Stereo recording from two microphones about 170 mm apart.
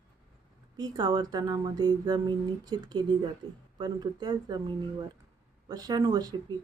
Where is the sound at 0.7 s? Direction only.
25° right (ahead or behind).